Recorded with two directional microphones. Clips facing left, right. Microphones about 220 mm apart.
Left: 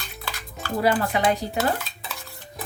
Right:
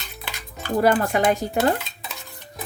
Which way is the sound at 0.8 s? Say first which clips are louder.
Right 2 dB; 50° right (ahead or behind).